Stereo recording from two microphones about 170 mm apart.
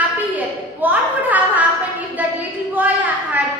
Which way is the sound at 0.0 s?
10° right (ahead or behind).